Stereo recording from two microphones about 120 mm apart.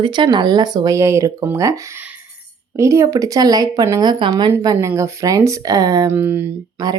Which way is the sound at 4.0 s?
40° right (ahead or behind).